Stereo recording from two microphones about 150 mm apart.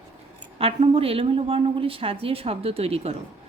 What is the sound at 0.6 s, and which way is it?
A woman's voice, 40° right (ahead or behind).